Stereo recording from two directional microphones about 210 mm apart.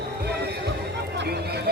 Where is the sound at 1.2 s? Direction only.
50° right (ahead or behind).